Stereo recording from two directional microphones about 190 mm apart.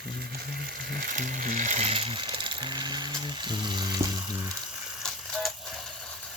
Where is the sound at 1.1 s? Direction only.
45° right (ahead or behind); by 3.8 s 25° right (ahead or behind).